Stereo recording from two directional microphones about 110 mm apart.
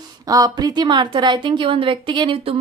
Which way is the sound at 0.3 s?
35° right (ahead or behind).